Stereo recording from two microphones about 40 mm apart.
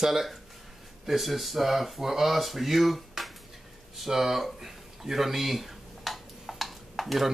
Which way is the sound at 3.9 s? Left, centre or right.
Centre.